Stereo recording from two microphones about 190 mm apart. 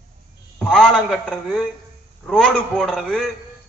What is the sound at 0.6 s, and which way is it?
A man's voice, 5° left (ahead or behind).